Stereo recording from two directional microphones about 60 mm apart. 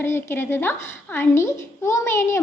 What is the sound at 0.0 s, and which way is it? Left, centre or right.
A woman's voice, left.